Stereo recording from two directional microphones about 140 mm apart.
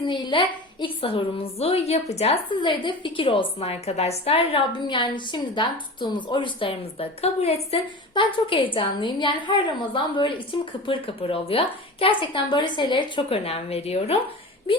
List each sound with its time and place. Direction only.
0.1 s a woman's voice: 35° left (ahead or behind)
2.5 s a woman's voice: 35° left (ahead or behind)
4.8 s a woman's voice: 35° left (ahead or behind)